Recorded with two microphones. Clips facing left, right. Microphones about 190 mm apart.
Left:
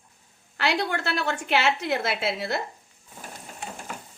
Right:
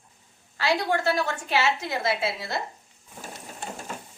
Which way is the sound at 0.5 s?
65° left (ahead or behind).